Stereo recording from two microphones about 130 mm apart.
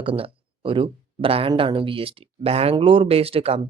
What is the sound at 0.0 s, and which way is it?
Speech, 45° right (ahead or behind).